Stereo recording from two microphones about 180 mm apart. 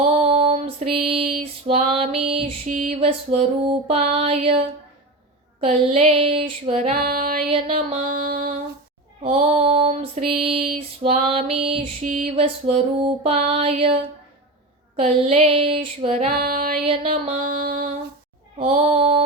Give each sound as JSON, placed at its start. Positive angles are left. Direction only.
{"t": 0.0, "sound": "female singing", "side_deg": -35}
{"t": 2.6, "sound": "female singing", "side_deg": -45}
{"t": 7.0, "sound": "music", "side_deg": -55}
{"t": 7.5, "sound": "a sound", "side_deg": -40}
{"t": 9.2, "sound": "female singing", "side_deg": -35}
{"t": 12.0, "sound": "a sound", "side_deg": -50}
{"t": 12.4, "sound": "female singing", "side_deg": -35}
{"t": 16.4, "sound": "music", "side_deg": -55}
{"t": 16.8, "sound": "music", "side_deg": -35}
{"t": 18.6, "sound": "female singing", "side_deg": -35}